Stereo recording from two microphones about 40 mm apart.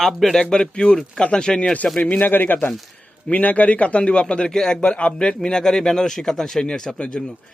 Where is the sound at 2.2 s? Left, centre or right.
Left.